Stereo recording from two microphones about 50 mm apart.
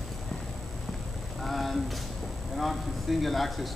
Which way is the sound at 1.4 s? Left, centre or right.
Centre.